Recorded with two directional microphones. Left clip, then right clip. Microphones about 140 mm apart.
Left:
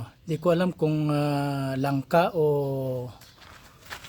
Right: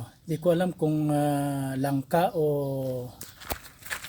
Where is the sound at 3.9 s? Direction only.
90° right.